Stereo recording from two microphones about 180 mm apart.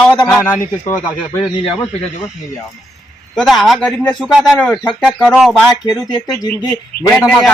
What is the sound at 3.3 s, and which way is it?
A man's voice, centre (ahead or behind).